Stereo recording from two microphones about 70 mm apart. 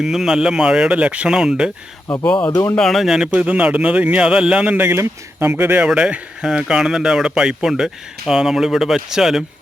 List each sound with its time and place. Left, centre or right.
0.0 s a man's voice: centre
2.2 s speech: centre
2.5 s speech: left
2.7 s speech: centre
3.3 s a man's voice: centre
4.8 s speech: right
5.8 s a man's voice: centre